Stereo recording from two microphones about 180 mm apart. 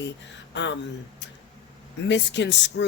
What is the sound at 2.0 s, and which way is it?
Speech, 75° left (ahead or behind).